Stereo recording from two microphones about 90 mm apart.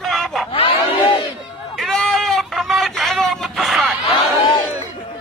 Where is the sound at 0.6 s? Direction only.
70° left (ahead or behind).